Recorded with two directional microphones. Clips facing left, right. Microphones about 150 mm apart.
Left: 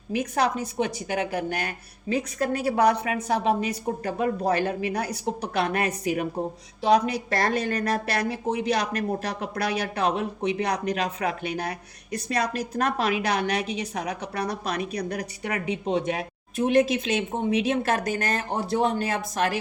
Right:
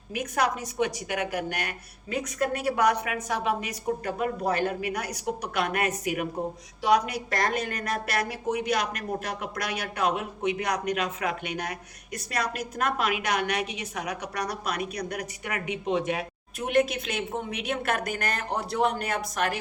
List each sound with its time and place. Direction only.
0.1 s a woman's voice: 30° left (ahead or behind)